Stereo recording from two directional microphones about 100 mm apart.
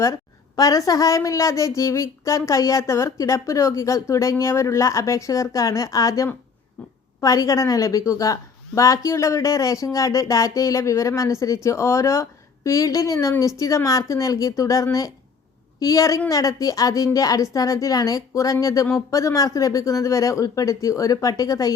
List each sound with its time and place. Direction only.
0.0 s a woman's voice: 35° left (ahead or behind)